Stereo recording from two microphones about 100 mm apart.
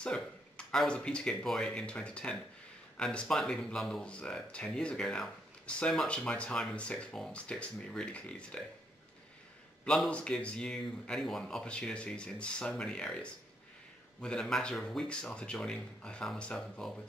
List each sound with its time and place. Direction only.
0.0 s speech: 10° left (ahead or behind)
9.8 s speech: 5° left (ahead or behind)